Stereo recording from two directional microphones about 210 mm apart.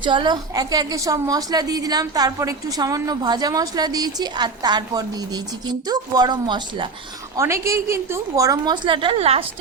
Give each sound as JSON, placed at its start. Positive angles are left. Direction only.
{"t": 0.0, "sound": "a woman's voice", "side_deg": -20}